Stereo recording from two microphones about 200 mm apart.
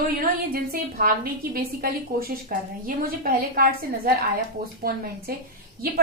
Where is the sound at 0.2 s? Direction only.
45° right (ahead or behind).